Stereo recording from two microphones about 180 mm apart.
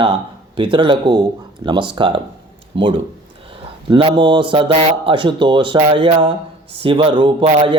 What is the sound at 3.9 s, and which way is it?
A man's voice, 25° right (ahead or behind).